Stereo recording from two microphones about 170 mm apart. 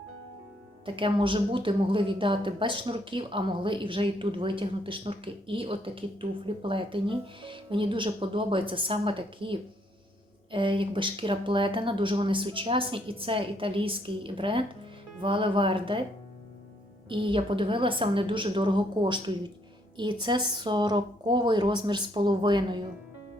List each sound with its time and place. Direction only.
0.9 s a woman's voice: 30° right (ahead or behind)
17.1 s a woman's voice: 30° right (ahead or behind)